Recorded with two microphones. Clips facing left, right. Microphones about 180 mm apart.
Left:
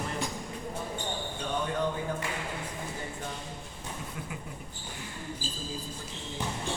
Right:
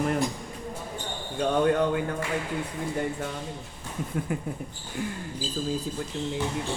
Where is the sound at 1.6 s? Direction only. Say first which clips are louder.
Right 8 dB; 65° right (ahead or behind).